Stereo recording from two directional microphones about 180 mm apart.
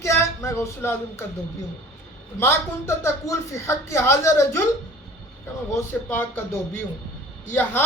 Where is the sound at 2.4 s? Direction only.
15° left (ahead or behind).